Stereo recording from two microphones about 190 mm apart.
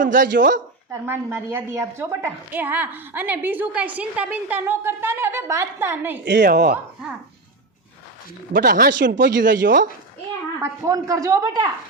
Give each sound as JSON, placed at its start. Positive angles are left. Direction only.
{"t": 0.0, "sound": "speech", "side_deg": -45}
{"t": 0.9, "sound": "a woman's voice", "side_deg": -10}
{"t": 6.2, "sound": "speech", "side_deg": -65}
{"t": 6.5, "sound": "speech", "side_deg": -40}
{"t": 8.5, "sound": "speech", "side_deg": -50}
{"t": 10.6, "sound": "a woman's voice", "side_deg": -15}